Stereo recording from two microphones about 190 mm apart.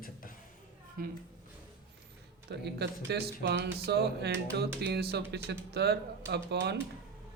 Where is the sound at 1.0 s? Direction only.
50° right (ahead or behind).